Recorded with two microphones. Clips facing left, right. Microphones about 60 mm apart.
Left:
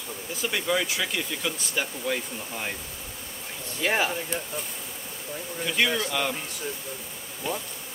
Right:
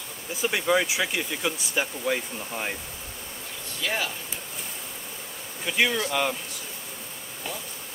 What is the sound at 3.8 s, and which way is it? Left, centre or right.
Speech, left.